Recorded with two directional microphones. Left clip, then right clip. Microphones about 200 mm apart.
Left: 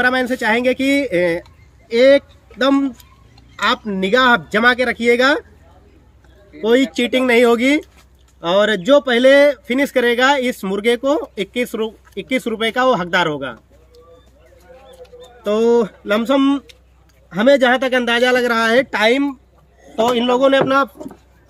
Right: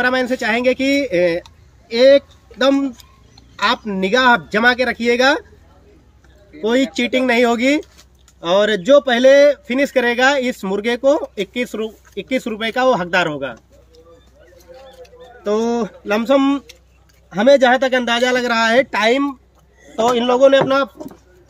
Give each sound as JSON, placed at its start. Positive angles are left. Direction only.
{"t": 0.0, "sound": "speech", "side_deg": 20}
{"t": 6.5, "sound": "speech", "side_deg": 20}
{"t": 15.4, "sound": "speech", "side_deg": 20}